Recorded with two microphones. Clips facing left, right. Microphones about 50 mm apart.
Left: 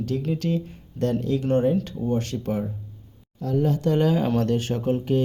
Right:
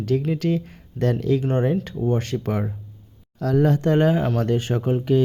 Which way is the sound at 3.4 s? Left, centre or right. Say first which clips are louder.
Right 4 dB; right.